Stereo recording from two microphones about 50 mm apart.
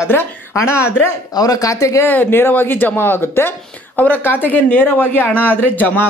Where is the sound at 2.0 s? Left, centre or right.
Left.